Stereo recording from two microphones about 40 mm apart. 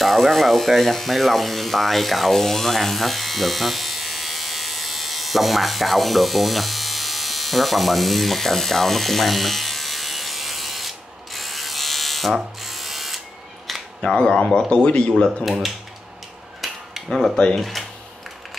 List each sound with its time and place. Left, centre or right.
0.0 s electric shaver: centre
12.5 s ratchet: centre
13.7 s camera: centre
14.0 s speech: centre
16.6 s cutlery: centre
17.6 s speech: centre